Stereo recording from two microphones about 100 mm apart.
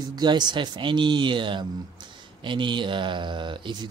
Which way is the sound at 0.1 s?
45° right (ahead or behind).